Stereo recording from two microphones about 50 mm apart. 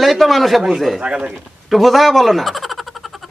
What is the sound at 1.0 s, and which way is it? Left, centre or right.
Speech, right.